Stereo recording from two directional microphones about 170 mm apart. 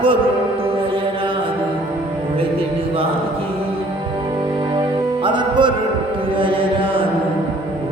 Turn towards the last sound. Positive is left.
turn(degrees=-30)  # may be behind; listen again after turning